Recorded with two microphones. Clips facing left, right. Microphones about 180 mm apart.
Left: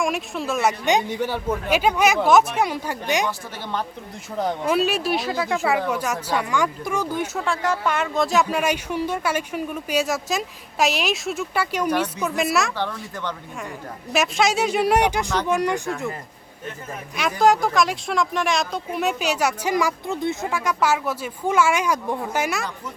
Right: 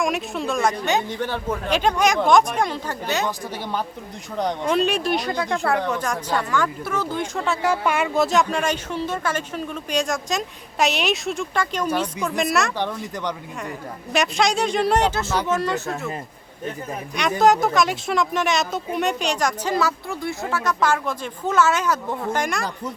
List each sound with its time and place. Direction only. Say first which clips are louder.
0.0 s speech: right 1 dB; centre (ahead or behind)
3.2 s a woman's voice: right 2 dB; 10° right (ahead or behind)
4.4 s speech: even; 5° left (ahead or behind)
7.4 s speech: right 3 dB; 5° right (ahead or behind)
12.7 s a woman's voice: right 2 dB; 15° right (ahead or behind)
13.6 s speech: right 2 dB; centre (ahead or behind)
17.4 s speech: even; centre (ahead or behind)